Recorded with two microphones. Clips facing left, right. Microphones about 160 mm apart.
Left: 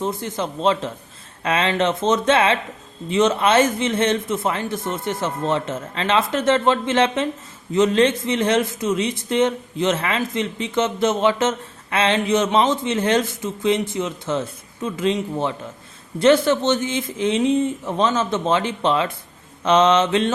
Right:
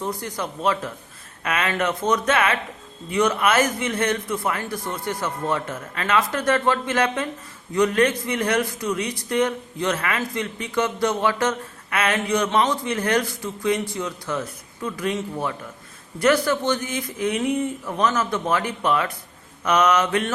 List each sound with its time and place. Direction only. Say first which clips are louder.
0.0 s speech: left 3 dB; 25° left (ahead or behind)